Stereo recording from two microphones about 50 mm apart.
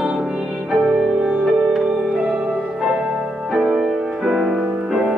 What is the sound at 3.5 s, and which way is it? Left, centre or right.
Music, centre.